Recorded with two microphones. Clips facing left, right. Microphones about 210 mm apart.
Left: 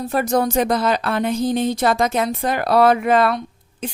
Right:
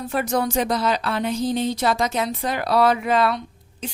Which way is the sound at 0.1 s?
40° left (ahead or behind).